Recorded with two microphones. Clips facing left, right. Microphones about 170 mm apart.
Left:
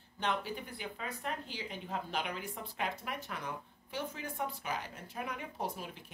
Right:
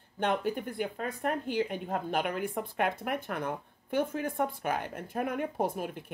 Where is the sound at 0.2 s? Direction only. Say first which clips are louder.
Right 7 dB; 55° right (ahead or behind).